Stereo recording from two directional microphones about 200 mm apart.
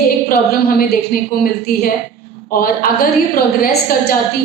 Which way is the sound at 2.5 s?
45° left (ahead or behind).